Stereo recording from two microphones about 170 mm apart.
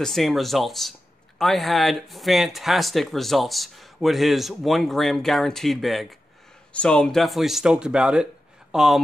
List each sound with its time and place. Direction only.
0.0 s speech: centre (ahead or behind)